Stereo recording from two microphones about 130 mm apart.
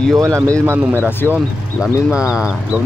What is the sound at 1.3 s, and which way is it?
Speech, 10° right (ahead or behind).